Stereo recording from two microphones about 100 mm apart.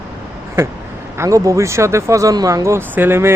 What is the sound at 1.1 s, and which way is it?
A man's voice, 30° right (ahead or behind).